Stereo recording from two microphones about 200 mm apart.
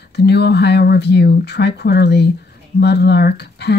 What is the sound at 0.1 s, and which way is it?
Speech, 55° left (ahead or behind).